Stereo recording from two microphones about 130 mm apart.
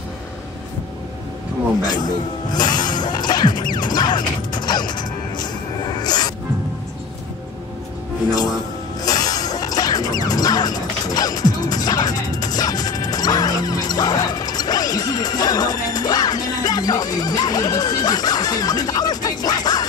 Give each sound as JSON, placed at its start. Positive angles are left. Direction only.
{"t": 1.8, "sound": "music", "side_deg": 30}
{"t": 3.7, "sound": "mechanisms", "side_deg": 35}
{"t": 5.9, "sound": "music", "side_deg": 30}
{"t": 9.0, "sound": "music", "side_deg": 30}